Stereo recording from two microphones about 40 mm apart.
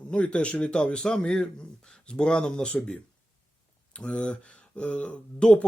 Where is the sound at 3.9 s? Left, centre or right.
Left.